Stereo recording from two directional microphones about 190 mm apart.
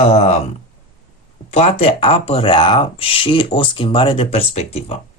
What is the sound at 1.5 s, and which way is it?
Speech, 30° left (ahead or behind).